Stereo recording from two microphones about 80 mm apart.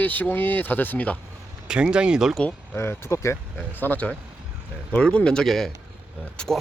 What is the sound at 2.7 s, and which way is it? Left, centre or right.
Speech, left.